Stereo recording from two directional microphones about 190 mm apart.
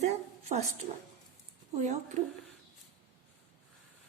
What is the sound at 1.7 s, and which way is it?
Speech, 40° right (ahead or behind).